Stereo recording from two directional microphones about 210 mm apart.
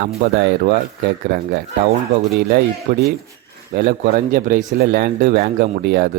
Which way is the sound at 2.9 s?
55° right (ahead or behind).